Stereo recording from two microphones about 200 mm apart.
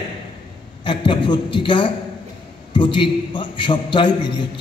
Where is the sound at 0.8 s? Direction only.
25° left (ahead or behind).